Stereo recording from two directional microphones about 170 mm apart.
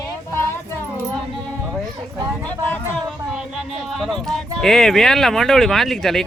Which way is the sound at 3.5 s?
Centre (ahead or behind).